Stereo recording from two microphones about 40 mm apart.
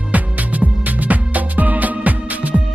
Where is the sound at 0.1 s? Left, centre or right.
Right.